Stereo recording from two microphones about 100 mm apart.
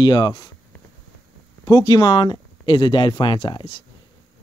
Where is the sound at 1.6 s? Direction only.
50° left (ahead or behind).